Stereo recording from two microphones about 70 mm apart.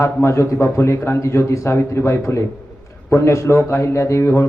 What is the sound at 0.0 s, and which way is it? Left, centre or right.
A man's voice, left.